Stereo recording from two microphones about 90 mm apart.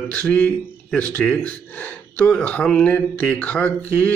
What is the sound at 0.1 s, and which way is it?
Speech, 15° left (ahead or behind).